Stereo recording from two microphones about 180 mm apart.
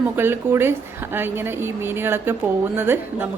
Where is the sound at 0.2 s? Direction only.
10° right (ahead or behind).